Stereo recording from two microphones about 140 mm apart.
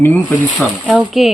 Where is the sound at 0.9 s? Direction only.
Centre (ahead or behind).